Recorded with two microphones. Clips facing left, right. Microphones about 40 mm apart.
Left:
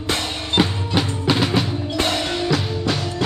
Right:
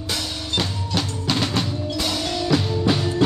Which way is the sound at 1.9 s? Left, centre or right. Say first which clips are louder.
Left 4 dB; left.